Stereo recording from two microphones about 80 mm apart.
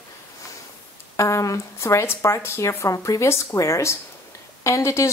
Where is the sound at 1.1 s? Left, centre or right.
Left.